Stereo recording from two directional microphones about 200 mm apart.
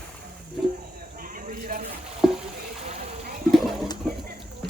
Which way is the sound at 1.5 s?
45° right (ahead or behind).